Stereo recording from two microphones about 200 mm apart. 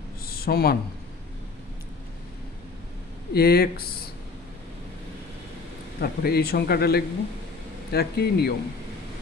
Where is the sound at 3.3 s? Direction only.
50° left (ahead or behind).